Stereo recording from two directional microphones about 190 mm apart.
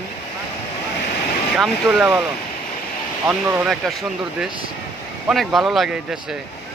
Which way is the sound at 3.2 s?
10° right (ahead or behind).